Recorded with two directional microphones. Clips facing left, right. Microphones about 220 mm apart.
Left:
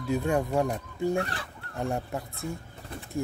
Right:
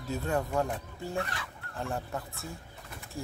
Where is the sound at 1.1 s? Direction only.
35° left (ahead or behind).